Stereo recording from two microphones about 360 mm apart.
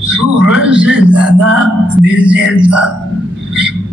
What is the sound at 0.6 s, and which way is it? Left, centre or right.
Speech, centre.